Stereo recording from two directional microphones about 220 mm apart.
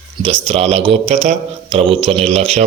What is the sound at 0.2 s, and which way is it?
Speech, 25° right (ahead or behind).